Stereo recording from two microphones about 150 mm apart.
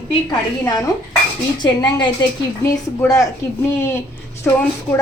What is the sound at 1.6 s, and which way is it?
A woman's voice, 30° left (ahead or behind).